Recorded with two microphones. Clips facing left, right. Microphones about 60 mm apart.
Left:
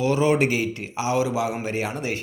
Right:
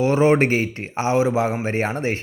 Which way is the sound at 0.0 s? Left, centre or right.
Right.